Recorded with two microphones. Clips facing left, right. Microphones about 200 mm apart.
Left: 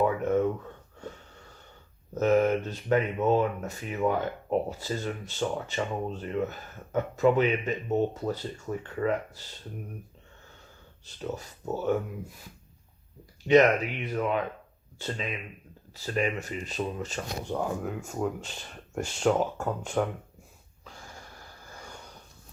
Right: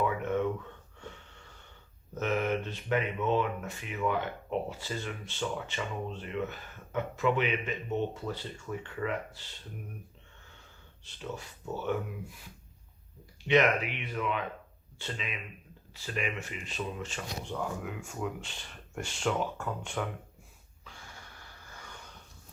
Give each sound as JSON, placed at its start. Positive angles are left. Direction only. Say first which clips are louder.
{"t": 0.0, "sound": "a sound", "louder": "left 5 dB", "side_deg": 40}
{"t": 1.0, "sound": "wheeze", "louder": "left 5 dB", "side_deg": 40}
{"t": 2.1, "sound": "speech", "louder": "left 7 dB", "side_deg": 40}
{"t": 11.0, "sound": "speech", "louder": "left 5 dB", "side_deg": 40}
{"t": 13.5, "sound": "speech", "louder": "left 5 dB", "side_deg": 40}
{"t": 20.8, "sound": "wheeze", "louder": "left 4 dB", "side_deg": 40}